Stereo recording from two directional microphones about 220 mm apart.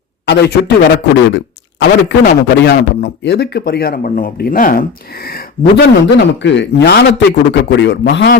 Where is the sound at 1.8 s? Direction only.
45° left (ahead or behind).